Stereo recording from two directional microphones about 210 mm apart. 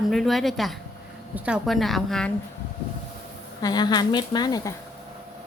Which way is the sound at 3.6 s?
20° left (ahead or behind).